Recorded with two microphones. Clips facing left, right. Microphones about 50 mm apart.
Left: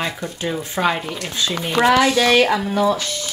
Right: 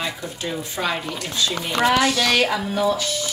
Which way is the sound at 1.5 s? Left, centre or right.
Centre.